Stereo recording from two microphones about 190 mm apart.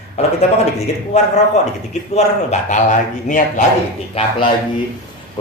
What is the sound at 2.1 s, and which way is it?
Speech, 35° left (ahead or behind).